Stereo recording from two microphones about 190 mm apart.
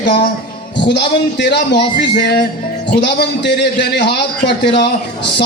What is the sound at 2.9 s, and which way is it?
A man's voice, 60° left (ahead or behind).